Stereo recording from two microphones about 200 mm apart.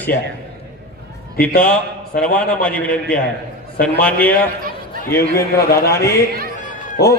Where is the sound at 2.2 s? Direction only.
5° left (ahead or behind).